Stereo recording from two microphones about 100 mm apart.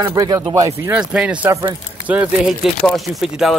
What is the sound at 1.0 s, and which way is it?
Speech, 10° right (ahead or behind).